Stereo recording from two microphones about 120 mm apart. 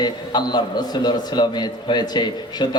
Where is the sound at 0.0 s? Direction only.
35° left (ahead or behind).